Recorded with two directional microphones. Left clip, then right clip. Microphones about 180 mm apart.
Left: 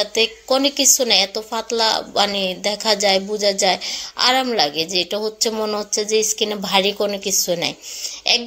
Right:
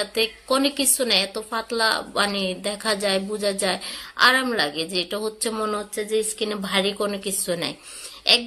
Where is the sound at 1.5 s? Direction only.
15° left (ahead or behind).